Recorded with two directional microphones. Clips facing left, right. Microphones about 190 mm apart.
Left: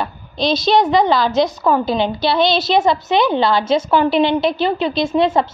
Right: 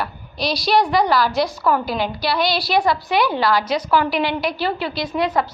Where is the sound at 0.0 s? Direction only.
20° left (ahead or behind).